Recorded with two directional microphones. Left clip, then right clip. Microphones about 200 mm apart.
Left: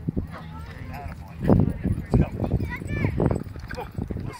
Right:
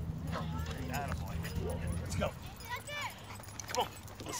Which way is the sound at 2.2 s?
30° right (ahead or behind).